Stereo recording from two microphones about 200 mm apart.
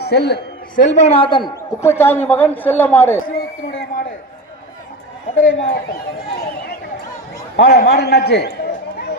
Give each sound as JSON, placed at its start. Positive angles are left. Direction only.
{"t": 0.0, "sound": "a man's voice", "side_deg": 55}
{"t": 0.8, "sound": "a man's voice", "side_deg": 35}
{"t": 3.7, "sound": "a sound", "side_deg": 50}
{"t": 5.5, "sound": "speech", "side_deg": 65}
{"t": 7.5, "sound": "a man's voice", "side_deg": 55}